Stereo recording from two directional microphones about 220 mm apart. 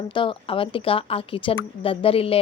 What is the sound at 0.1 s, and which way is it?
A woman's voice, 25° left (ahead or behind).